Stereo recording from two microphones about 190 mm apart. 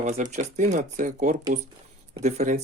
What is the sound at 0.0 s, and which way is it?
Speech, 40° right (ahead or behind).